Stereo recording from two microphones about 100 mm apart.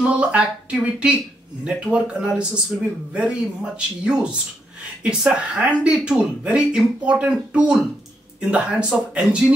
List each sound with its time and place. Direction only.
0.0 s speech: 10° right (ahead or behind)